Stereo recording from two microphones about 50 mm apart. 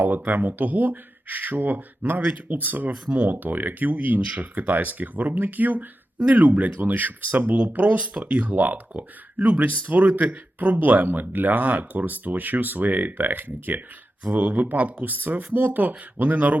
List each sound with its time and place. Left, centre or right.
0.0 s speech: right